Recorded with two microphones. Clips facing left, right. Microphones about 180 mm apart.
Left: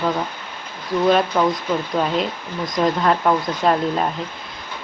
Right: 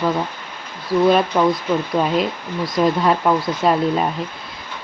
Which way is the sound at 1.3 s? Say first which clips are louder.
Right 2 dB; 10° right (ahead or behind).